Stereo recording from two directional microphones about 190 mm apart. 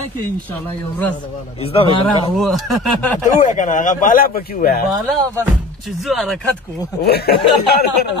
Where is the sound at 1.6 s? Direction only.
30° left (ahead or behind).